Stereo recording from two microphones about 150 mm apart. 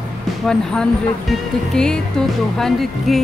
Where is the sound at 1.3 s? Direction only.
5° left (ahead or behind).